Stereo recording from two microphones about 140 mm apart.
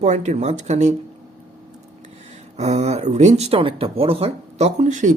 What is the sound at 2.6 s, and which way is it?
Speech, 50° right (ahead or behind).